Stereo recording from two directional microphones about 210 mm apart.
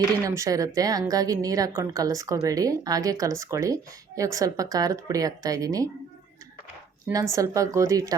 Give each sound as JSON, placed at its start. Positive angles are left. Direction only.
{"t": 0.3, "sound": "a woman's voice", "side_deg": -15}
{"t": 7.1, "sound": "a woman's voice", "side_deg": -15}